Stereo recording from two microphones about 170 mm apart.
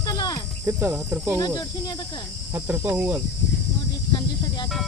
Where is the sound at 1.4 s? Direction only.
25° left (ahead or behind).